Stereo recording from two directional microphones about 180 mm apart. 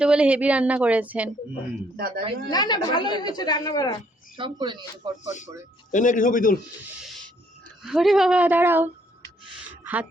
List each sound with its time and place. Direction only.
0.0 s speech: 5° right (ahead or behind)
2.0 s speech: 60° right (ahead or behind)
2.5 s a woman's voice: 25° left (ahead or behind)
4.4 s speech: 25° right (ahead or behind)
5.9 s speech: 45° left (ahead or behind)
7.0 s a sound: centre (ahead or behind)
7.8 s speech: centre (ahead or behind)
9.8 s a sound: 10° right (ahead or behind)